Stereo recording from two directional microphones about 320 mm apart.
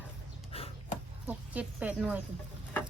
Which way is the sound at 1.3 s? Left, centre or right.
Centre.